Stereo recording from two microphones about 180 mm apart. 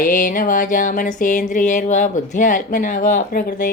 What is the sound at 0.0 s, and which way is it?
Speech, 45° left (ahead or behind).